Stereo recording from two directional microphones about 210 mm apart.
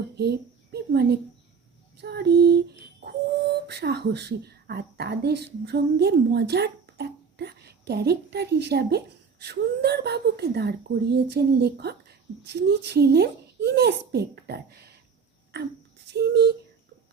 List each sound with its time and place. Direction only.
0.2 s a child's voice: 50° right (ahead or behind)
3.7 s speech: 50° right (ahead or behind)
16.1 s speech: 50° right (ahead or behind)